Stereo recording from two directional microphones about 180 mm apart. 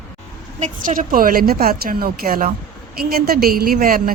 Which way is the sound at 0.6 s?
45° right (ahead or behind).